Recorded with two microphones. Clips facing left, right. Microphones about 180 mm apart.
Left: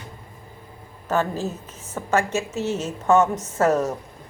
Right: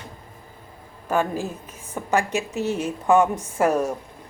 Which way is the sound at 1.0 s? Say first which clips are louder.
Even; 10° right (ahead or behind).